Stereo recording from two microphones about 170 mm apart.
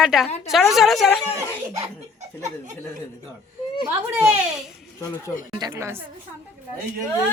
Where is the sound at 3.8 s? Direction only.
5° right (ahead or behind).